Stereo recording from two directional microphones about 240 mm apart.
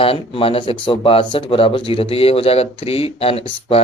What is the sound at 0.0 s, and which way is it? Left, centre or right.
Speech, left.